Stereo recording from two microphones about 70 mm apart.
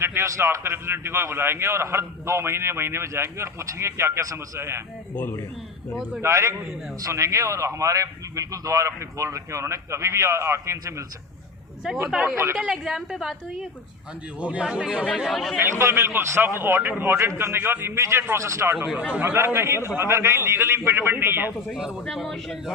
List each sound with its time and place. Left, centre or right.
0.0 s a man's voice: right
6.2 s a man's voice: right
12.1 s a man's voice: centre
14.3 s a man's voice: centre
15.3 s a woman's voice: centre
15.6 s a man's voice: right
17.9 s a man's voice: right
21.7 s a man's voice: centre
22.0 s a woman's voice: centre